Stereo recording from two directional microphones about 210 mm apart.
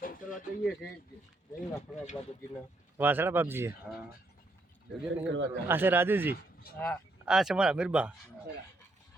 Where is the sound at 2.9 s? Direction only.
10° right (ahead or behind).